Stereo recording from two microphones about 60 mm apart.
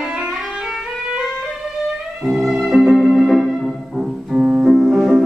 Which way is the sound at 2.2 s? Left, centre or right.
Centre.